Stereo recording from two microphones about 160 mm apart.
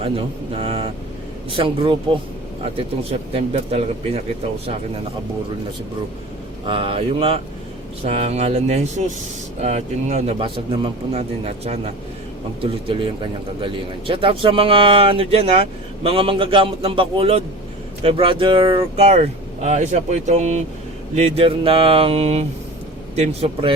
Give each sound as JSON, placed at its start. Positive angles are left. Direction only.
{"t": 0.6, "sound": "speech", "side_deg": -40}
{"t": 6.7, "sound": "speech", "side_deg": -35}
{"t": 12.9, "sound": "speech", "side_deg": -35}